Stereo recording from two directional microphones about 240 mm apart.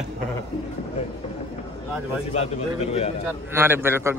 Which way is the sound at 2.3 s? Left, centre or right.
Left.